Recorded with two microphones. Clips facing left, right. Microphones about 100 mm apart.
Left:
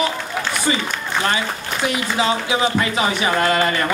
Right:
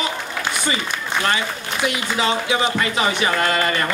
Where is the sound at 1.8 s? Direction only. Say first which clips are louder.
Left 2 dB; 25° left (ahead or behind).